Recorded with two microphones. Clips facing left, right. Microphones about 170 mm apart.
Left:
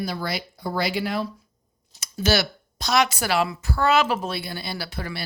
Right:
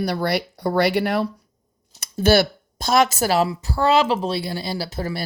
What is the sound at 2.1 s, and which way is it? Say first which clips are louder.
Speech: right 6 dB; 55° right (ahead or behind).